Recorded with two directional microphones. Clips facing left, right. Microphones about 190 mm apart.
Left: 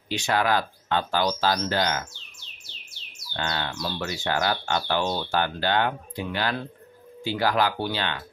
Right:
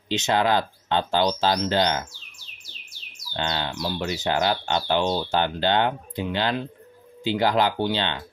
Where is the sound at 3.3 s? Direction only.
20° right (ahead or behind).